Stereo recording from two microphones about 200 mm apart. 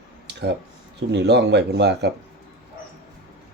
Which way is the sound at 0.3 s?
55° right (ahead or behind).